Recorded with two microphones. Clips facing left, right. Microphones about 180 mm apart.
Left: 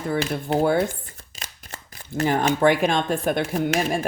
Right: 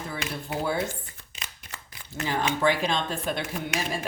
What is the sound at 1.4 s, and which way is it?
Speech, 40° left (ahead or behind).